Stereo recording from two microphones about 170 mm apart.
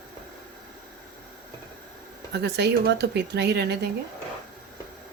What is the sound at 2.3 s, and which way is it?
Speech, 75° right (ahead or behind).